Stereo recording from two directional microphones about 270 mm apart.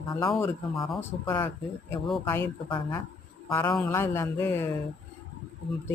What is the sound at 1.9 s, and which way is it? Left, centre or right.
Speech, centre.